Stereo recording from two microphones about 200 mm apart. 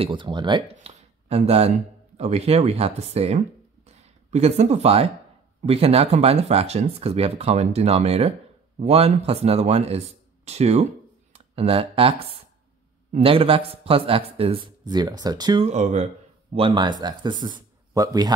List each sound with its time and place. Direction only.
0.0 s speech: 25° right (ahead or behind)
3.8 s a sound: 30° right (ahead or behind)
5.6 s a man's voice: 30° right (ahead or behind)
15.6 s speech: 35° right (ahead or behind)
16.5 s a man's voice: 25° right (ahead or behind)